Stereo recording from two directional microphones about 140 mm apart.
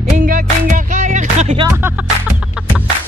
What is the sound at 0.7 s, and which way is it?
Music, 60° right (ahead or behind).